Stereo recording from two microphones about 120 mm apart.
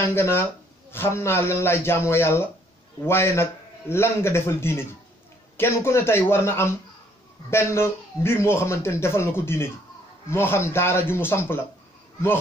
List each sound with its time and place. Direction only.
0.0 s speech: 20° left (ahead or behind)